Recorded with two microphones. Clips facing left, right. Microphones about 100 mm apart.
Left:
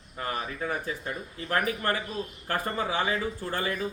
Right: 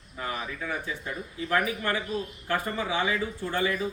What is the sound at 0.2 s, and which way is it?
A man's voice, 40° left (ahead or behind).